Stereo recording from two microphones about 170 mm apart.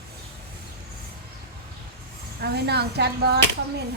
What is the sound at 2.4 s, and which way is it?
Speech, 75° right (ahead or behind).